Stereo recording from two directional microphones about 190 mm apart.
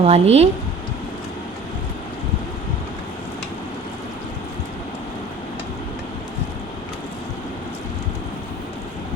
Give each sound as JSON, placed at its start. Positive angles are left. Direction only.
{"t": 0.0, "sound": "speech", "side_deg": -35}